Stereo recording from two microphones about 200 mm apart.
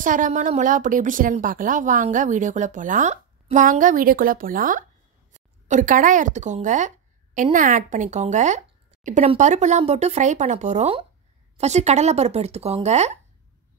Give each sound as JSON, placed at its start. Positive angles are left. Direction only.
{"t": 0.0, "sound": "speech", "side_deg": -40}